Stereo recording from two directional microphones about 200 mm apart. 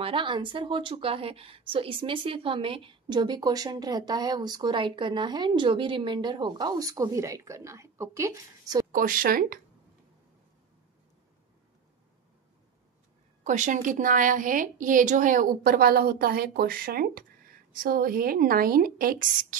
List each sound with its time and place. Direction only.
0.0 s speech: 25° right (ahead or behind)
8.9 s a woman's voice: 45° right (ahead or behind)
13.4 s a woman's voice: 40° right (ahead or behind)